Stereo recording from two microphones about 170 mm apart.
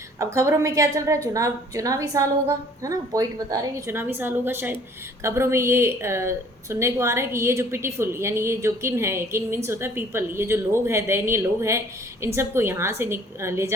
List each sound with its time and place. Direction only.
0.2 s a woman's voice: 20° right (ahead or behind)